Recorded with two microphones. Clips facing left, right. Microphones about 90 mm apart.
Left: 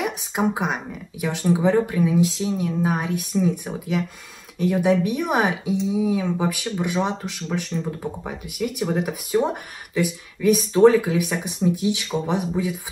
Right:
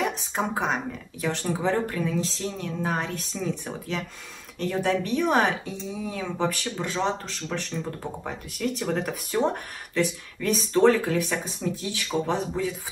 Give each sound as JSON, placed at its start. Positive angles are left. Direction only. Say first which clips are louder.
{"t": 0.0, "sound": "speech", "louder": "left 4 dB", "side_deg": 10}